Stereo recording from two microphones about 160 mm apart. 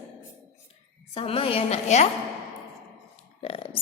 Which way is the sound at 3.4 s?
35° left (ahead or behind).